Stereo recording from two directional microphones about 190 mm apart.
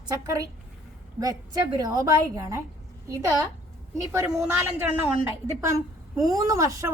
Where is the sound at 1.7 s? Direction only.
20° right (ahead or behind).